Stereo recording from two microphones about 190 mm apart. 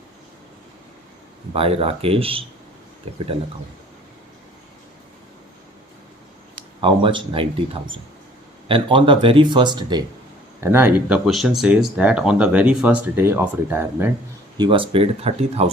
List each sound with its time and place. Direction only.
1.5 s speech: 30° right (ahead or behind)
6.8 s speech: 25° right (ahead or behind)
10.6 s speech: 10° right (ahead or behind)
14.6 s speech: 25° right (ahead or behind)